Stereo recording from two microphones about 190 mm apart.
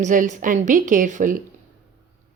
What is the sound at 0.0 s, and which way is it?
A woman's voice, 40° right (ahead or behind).